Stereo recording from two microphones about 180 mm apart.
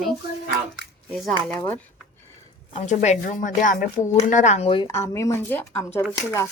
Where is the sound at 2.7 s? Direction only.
40° left (ahead or behind).